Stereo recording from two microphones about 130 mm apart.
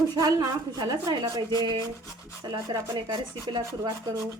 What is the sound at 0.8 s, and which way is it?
A woman's voice, 30° right (ahead or behind).